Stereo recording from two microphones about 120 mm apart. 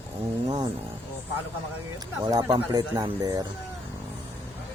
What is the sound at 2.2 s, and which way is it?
Speech, 35° right (ahead or behind).